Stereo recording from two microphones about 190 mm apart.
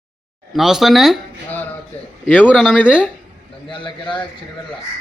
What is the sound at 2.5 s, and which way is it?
Speech, 5° right (ahead or behind).